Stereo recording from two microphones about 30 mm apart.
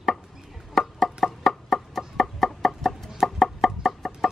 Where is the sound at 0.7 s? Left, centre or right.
Centre.